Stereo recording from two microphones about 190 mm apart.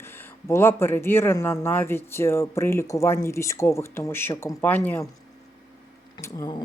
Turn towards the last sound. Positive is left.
turn(degrees=20)  # may be behind; listen again after turning